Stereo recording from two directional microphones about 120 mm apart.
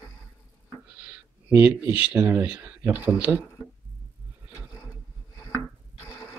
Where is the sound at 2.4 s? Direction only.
10° right (ahead or behind).